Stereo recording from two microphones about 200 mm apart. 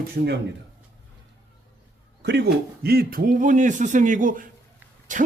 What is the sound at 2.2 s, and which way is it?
Speech, 55° right (ahead or behind).